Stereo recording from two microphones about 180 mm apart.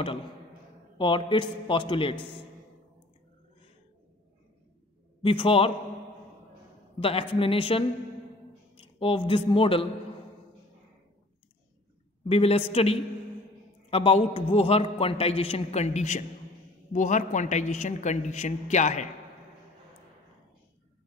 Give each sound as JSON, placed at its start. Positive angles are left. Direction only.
{"t": 0.9, "sound": "a man's voice", "side_deg": 25}
{"t": 5.2, "sound": "a man's voice", "side_deg": 30}
{"t": 7.0, "sound": "a man's voice", "side_deg": 30}
{"t": 12.3, "sound": "a man's voice", "side_deg": 35}